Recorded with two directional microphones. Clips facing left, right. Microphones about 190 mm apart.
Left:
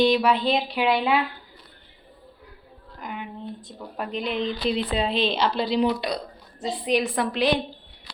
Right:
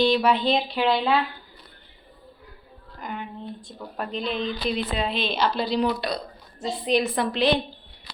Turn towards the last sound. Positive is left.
turn(degrees=10)  # may be behind; listen again after turning